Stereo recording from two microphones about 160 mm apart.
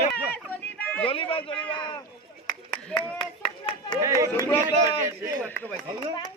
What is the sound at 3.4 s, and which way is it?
Clapping, 35° left (ahead or behind).